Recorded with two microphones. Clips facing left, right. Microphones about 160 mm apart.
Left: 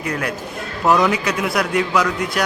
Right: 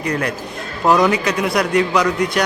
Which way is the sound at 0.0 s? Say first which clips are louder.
Right 3 dB; 5° left (ahead or behind).